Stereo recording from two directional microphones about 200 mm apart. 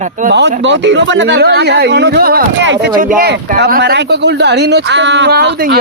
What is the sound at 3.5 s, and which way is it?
Speech, 55° right (ahead or behind).